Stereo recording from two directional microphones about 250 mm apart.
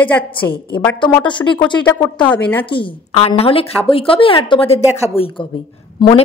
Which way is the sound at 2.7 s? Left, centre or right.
Left.